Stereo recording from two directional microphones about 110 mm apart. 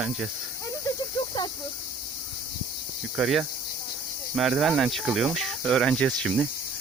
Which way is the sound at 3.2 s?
Centre (ahead or behind).